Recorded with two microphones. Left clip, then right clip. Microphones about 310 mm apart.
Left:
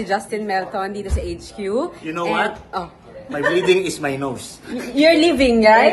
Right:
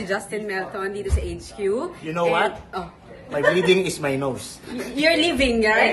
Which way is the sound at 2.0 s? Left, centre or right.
Centre.